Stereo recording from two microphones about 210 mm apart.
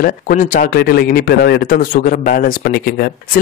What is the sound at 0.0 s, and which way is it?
Speech, 40° left (ahead or behind).